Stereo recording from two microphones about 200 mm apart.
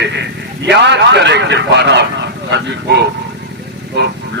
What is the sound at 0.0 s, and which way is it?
A man's voice, 60° right (ahead or behind).